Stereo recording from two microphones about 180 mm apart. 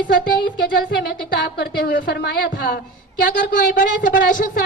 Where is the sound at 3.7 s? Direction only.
50° left (ahead or behind).